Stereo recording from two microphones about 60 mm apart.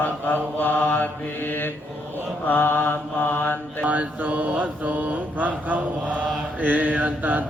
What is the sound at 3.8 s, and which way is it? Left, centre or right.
Mantra, right.